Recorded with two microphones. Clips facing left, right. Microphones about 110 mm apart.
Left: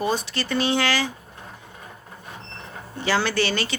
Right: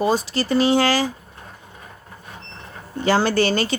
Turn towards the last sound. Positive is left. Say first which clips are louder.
# right 5 dB
turn(degrees=-40)  # may be behind; listen again after turning